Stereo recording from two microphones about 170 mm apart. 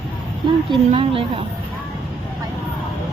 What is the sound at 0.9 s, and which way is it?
Speech, 35° right (ahead or behind).